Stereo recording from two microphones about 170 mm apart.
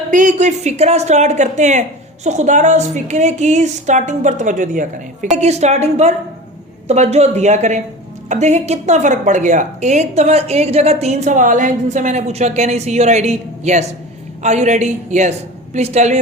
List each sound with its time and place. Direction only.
0.1 s a woman's voice: 50° right (ahead or behind)